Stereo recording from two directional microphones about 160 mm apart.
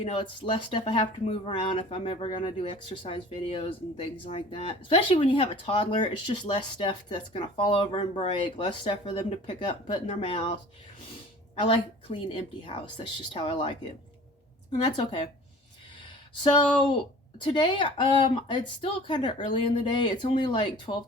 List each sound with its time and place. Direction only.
0.0 s speech: 35° left (ahead or behind)
11.6 s speech: 35° left (ahead or behind)
14.8 s speech: 30° left (ahead or behind)
16.4 s speech: 30° left (ahead or behind)